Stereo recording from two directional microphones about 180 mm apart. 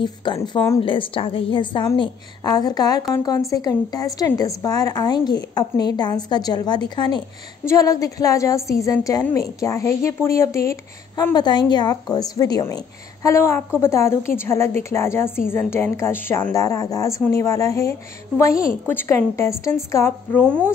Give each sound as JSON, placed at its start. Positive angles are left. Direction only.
{"t": 0.0, "sound": "a woman's voice", "side_deg": 25}